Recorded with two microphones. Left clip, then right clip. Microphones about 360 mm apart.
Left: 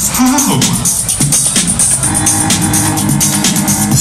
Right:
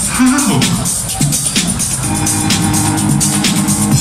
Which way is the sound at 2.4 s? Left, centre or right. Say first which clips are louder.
Left 1 dB; centre.